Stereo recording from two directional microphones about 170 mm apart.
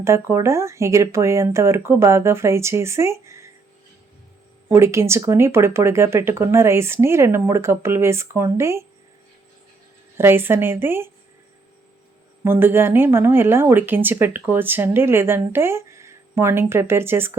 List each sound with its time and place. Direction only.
0.0 s speech: 15° right (ahead or behind)
4.7 s speech: 15° right (ahead or behind)
10.2 s speech: 15° right (ahead or behind)
12.5 s speech: 15° right (ahead or behind)